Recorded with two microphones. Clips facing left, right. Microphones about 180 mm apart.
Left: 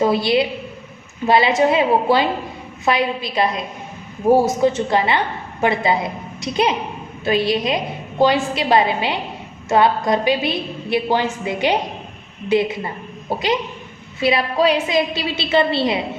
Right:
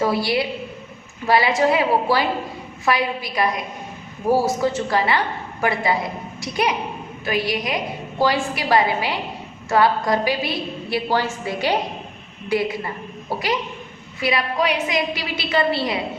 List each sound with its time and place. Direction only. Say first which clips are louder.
0.0 s a woman's voice: left 4 dB; 20° left (ahead or behind)